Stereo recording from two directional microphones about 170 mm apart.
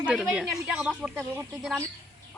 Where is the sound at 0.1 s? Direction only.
5° right (ahead or behind).